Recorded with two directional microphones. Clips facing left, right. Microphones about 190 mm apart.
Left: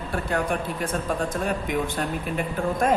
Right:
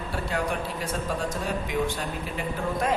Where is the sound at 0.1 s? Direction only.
50° left (ahead or behind).